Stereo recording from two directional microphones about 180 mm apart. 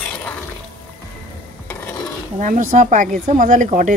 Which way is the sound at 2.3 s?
45° right (ahead or behind).